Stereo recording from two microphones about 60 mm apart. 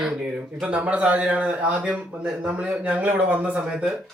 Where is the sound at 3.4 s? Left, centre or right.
Centre.